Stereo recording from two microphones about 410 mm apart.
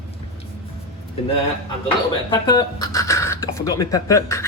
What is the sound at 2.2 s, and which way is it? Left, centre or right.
Speech, centre.